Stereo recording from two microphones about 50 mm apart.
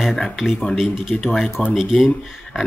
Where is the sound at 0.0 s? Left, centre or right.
Centre.